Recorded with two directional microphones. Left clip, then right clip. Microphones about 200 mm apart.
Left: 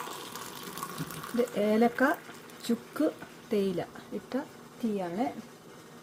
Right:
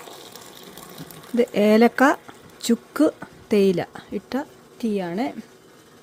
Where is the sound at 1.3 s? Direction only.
40° right (ahead or behind).